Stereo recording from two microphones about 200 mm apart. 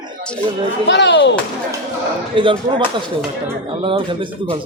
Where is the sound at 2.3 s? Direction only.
25° right (ahead or behind).